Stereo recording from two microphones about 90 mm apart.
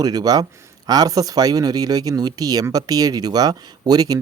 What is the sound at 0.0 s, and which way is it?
Speech, 45° right (ahead or behind).